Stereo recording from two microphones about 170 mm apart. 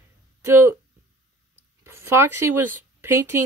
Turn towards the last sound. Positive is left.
turn(degrees=-15)  # may be behind; listen again after turning